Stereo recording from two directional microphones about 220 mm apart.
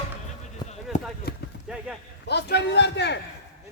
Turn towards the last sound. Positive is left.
turn(degrees=50)  # may be behind; listen again after turning